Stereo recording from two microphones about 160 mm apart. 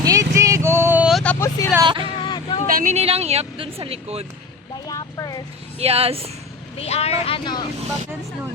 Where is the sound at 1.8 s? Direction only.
30° right (ahead or behind).